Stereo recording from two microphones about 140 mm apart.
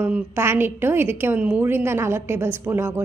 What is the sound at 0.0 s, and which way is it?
A woman's voice, 15° right (ahead or behind).